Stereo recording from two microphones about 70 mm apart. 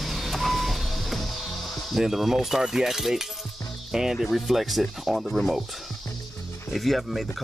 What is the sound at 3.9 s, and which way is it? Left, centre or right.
Speech, centre.